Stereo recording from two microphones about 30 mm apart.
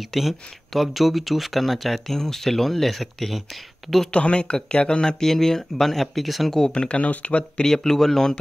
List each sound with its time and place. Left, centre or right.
0.1 s speech: centre
2.0 s speech: centre
4.1 s speech: left
5.2 s speech: centre
6.7 s speech: left
7.0 s speech: left
7.6 s speech: centre